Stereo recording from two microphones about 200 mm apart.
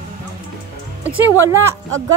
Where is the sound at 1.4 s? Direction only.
10° right (ahead or behind).